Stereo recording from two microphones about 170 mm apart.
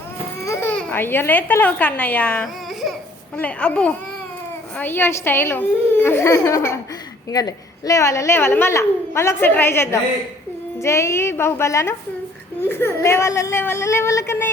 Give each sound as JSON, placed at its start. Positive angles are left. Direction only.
{"t": 0.4, "sound": "a woman's voice", "side_deg": 15}